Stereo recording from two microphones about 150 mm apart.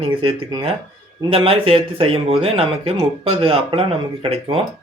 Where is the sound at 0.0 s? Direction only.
35° right (ahead or behind).